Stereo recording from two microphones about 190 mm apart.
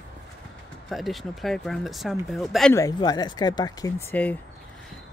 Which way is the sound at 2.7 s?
20° left (ahead or behind).